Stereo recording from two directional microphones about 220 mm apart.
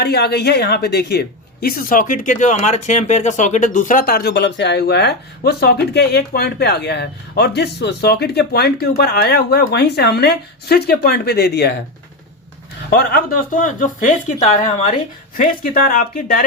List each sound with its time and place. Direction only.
0.0 s speech: 50° left (ahead or behind)
12.9 s speech: 45° left (ahead or behind)